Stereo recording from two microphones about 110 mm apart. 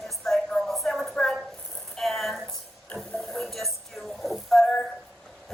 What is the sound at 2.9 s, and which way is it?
Music, 10° left (ahead or behind).